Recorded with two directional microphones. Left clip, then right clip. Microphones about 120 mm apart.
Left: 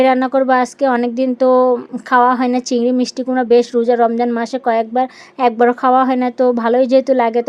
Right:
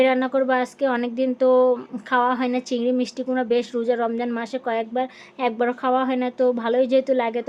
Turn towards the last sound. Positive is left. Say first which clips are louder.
# left 8 dB
turn(degrees=55)  # may be behind; listen again after turning